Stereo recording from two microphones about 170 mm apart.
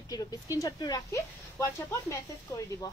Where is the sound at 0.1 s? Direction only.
20° left (ahead or behind).